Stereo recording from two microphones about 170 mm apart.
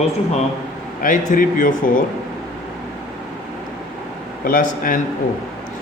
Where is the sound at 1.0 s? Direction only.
50° left (ahead or behind).